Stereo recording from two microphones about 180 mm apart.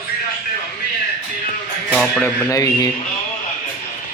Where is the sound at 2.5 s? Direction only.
20° left (ahead or behind).